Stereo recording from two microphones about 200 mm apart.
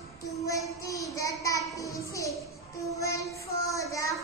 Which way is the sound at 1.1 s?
15° left (ahead or behind).